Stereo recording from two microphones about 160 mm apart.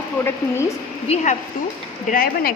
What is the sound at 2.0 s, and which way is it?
Speech, 65° left (ahead or behind).